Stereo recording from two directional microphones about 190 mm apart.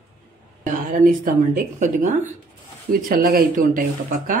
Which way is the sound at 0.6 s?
45° right (ahead or behind).